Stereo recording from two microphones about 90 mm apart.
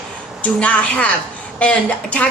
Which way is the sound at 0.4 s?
15° left (ahead or behind).